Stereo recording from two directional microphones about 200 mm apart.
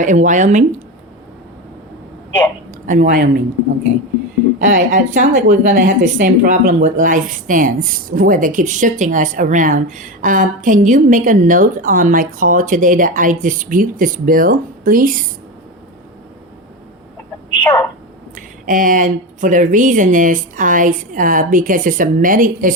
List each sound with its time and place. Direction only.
0.0 s speech: 40° right (ahead or behind)
2.8 s speech: 40° right (ahead or behind)
4.6 s speech: 40° right (ahead or behind)
17.6 s speech: 10° left (ahead or behind)
18.3 s speech: 40° right (ahead or behind)